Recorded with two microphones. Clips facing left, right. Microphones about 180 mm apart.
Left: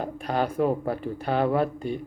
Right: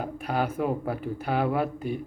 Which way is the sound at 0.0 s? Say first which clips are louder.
Left 2 dB; 5° right (ahead or behind).